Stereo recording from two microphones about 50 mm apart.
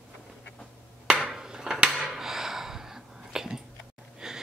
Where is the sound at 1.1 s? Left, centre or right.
Centre.